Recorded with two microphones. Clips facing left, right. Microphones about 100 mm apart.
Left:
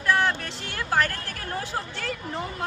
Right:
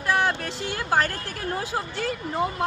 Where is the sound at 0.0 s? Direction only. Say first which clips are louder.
Even; 15° right (ahead or behind).